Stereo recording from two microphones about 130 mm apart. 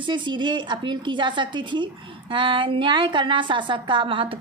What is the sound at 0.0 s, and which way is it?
A woman's voice, 35° right (ahead or behind).